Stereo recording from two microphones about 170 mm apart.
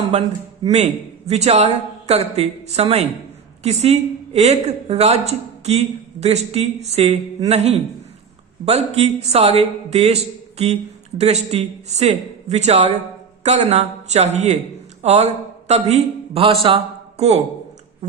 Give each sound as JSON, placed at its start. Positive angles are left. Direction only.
{"t": 1.3, "sound": "a woman's voice", "side_deg": -40}